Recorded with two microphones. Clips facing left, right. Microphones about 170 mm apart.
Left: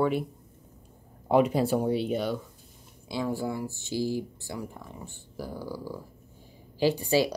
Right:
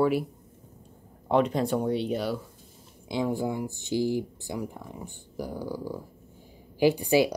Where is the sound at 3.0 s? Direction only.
20° right (ahead or behind).